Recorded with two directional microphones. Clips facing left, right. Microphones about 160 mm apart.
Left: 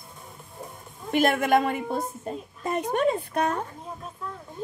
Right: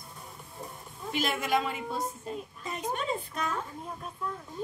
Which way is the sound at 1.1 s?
55° left (ahead or behind).